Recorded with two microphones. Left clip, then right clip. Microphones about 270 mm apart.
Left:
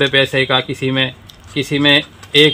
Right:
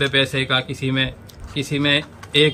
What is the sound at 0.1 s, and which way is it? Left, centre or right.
Speech, centre.